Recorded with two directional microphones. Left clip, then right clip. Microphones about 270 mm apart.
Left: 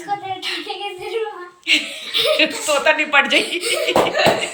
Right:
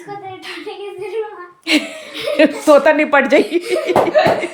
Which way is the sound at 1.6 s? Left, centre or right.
Right.